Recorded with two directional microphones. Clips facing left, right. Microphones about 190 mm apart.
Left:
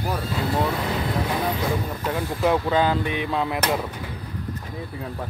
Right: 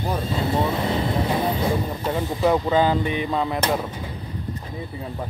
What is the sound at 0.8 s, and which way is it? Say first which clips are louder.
Vehicle: right 3 dB; 25° right (ahead or behind).